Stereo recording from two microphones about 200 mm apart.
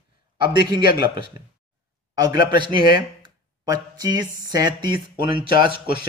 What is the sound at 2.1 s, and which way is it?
A man's voice, 20° right (ahead or behind).